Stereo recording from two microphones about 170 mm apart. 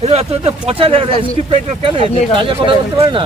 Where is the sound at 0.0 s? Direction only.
35° right (ahead or behind).